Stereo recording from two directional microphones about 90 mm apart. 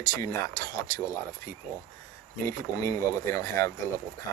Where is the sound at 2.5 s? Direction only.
35° left (ahead or behind).